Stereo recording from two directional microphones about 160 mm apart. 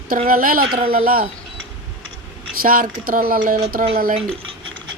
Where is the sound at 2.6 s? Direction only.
60° right (ahead or behind).